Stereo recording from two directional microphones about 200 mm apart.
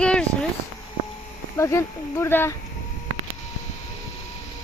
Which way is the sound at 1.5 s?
15° left (ahead or behind).